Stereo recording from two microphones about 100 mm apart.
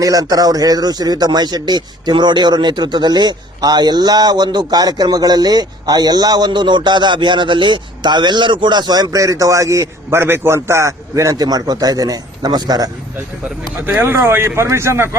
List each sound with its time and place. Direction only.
0.0 s speech: 40° right (ahead or behind)
13.8 s speech: 20° right (ahead or behind)